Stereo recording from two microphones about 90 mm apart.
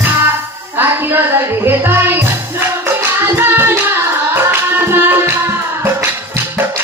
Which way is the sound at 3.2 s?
25° right (ahead or behind).